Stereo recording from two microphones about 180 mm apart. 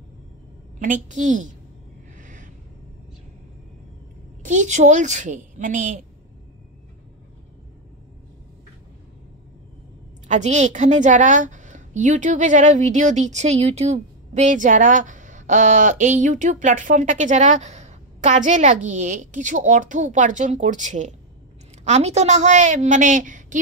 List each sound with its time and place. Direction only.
0.7 s a woman's voice: 45° right (ahead or behind)
2.1 s a sound: 45° right (ahead or behind)
4.5 s a woman's voice: 40° right (ahead or behind)
10.2 s a woman's voice: 40° right (ahead or behind)